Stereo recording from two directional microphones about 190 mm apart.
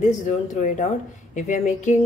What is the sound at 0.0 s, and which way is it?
A woman's voice, 40° left (ahead or behind).